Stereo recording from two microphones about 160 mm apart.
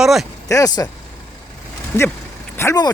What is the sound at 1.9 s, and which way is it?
Speech, 15° left (ahead or behind).